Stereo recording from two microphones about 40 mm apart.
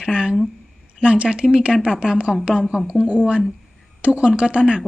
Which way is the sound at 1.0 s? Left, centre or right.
Right.